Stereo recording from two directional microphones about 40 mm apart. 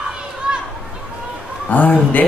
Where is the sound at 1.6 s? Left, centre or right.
Left.